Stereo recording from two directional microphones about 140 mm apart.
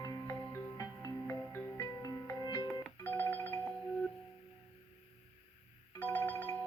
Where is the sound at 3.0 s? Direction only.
15° left (ahead or behind).